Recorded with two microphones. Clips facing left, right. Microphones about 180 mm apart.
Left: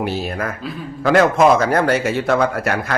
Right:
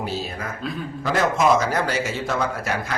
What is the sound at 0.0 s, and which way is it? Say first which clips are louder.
A man's voice: left 6 dB; 65° left (ahead or behind).